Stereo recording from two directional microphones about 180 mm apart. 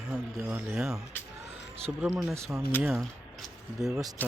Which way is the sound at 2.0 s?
Centre (ahead or behind).